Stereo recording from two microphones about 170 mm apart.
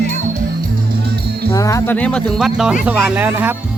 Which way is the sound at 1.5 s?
20° left (ahead or behind).